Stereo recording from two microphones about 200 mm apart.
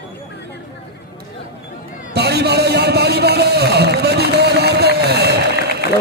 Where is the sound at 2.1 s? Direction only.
55° right (ahead or behind).